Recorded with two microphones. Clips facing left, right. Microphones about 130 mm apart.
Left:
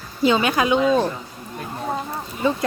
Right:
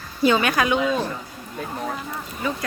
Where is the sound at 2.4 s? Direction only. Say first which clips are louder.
Left 6 dB; 25° left (ahead or behind).